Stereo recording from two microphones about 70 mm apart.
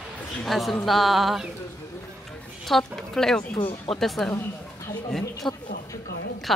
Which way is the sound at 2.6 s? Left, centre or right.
Centre.